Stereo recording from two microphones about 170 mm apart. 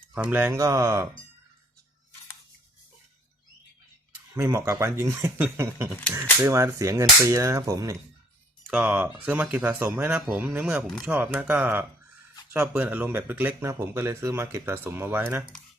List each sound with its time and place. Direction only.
0.1 s speech: 10° right (ahead or behind)
4.4 s speech: 15° right (ahead or behind)
8.6 s speech: 5° right (ahead or behind)